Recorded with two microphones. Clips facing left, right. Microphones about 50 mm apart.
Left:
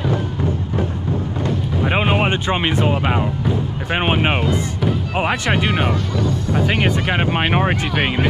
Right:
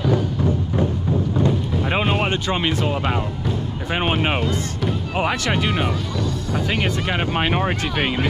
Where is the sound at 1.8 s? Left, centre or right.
Centre.